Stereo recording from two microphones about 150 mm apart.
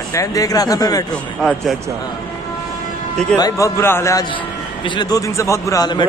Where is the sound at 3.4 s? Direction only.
25° left (ahead or behind).